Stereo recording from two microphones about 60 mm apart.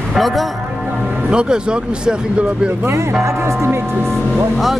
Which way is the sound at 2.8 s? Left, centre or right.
Right.